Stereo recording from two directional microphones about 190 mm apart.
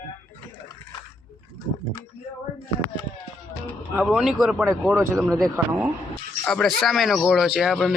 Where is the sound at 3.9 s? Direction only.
5° right (ahead or behind).